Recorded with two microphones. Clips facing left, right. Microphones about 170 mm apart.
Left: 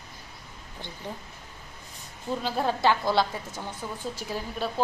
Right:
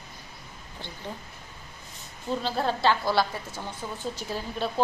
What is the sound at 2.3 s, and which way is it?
A woman's voice, 10° left (ahead or behind).